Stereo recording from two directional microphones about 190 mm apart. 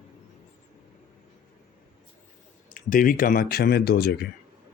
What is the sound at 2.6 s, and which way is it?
Speech, 45° left (ahead or behind).